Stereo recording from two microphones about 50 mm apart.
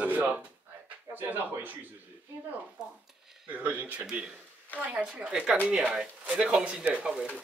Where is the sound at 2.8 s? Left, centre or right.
Centre.